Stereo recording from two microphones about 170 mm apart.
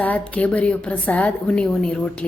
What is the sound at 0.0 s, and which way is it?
A woman's voice, 10° left (ahead or behind).